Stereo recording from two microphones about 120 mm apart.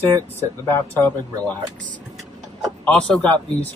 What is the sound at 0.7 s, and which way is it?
Speech, 20° left (ahead or behind).